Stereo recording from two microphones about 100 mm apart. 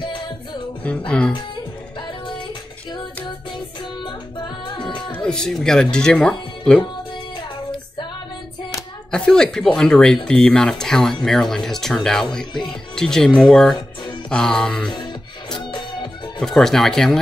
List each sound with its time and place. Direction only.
0.8 s speech: 10° left (ahead or behind)
2.0 s music: 50° left (ahead or behind)
3.5 s music: 50° left (ahead or behind)
5.1 s speech: 10° left (ahead or behind)
9.1 s speech: 5° left (ahead or behind)
16.3 s speech: 5° left (ahead or behind)